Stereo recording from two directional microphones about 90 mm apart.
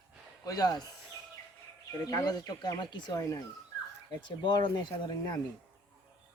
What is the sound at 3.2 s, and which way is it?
Speech, 35° left (ahead or behind).